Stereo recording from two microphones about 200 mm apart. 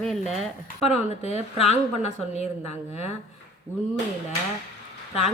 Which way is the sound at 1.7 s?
35° left (ahead or behind).